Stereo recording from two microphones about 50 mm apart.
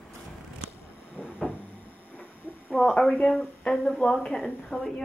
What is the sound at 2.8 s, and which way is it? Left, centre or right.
Speech, centre.